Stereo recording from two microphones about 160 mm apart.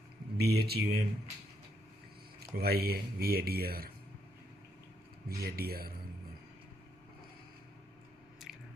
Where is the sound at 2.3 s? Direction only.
75° right (ahead or behind).